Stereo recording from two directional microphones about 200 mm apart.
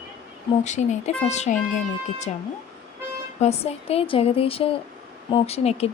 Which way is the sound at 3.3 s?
30° left (ahead or behind).